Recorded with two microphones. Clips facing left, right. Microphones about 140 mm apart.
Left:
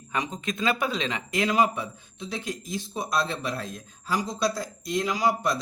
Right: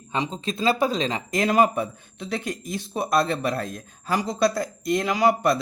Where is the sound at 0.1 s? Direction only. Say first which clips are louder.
Right 3 dB; 25° right (ahead or behind).